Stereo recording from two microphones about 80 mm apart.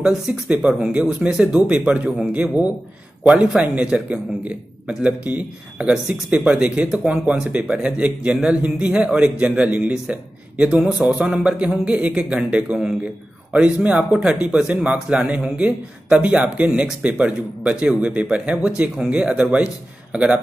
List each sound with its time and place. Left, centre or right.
0.0 s speech: centre